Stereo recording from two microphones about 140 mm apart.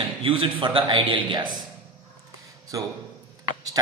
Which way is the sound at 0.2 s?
40° right (ahead or behind).